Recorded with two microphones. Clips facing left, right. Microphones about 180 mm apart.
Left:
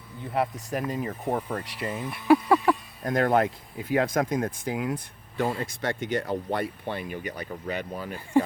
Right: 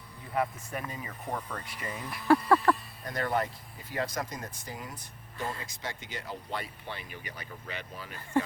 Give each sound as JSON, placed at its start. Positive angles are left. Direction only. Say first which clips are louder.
{"t": 0.7, "sound": "speech", "louder": "left 9 dB", "side_deg": 80}
{"t": 1.2, "sound": "speech", "louder": "left 6 dB", "side_deg": 30}
{"t": 2.0, "sound": "speech", "louder": "left 4 dB", "side_deg": 0}
{"t": 3.0, "sound": "speech", "louder": "left 8 dB", "side_deg": 50}